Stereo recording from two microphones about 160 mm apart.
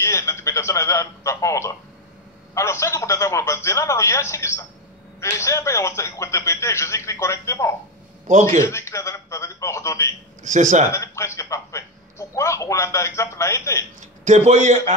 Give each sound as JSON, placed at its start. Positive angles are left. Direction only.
{"t": 0.0, "sound": "a man's voice", "side_deg": 15}
{"t": 8.3, "sound": "speech", "side_deg": -50}
{"t": 8.5, "sound": "a man's voice", "side_deg": 20}
{"t": 10.4, "sound": "speech", "side_deg": -50}
{"t": 10.9, "sound": "a man's voice", "side_deg": 15}
{"t": 14.2, "sound": "speech", "side_deg": -50}